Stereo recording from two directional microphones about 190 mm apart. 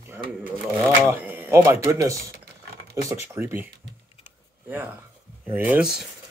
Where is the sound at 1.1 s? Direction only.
10° right (ahead or behind).